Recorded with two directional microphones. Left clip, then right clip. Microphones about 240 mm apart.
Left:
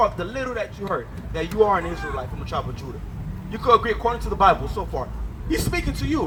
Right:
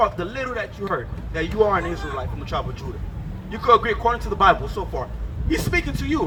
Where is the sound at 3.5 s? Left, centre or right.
Centre.